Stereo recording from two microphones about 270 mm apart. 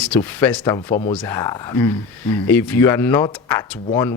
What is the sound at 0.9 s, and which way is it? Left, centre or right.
Speech, left.